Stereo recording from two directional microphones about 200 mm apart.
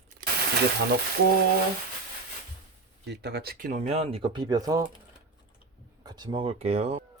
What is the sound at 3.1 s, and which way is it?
Speech, 55° right (ahead or behind).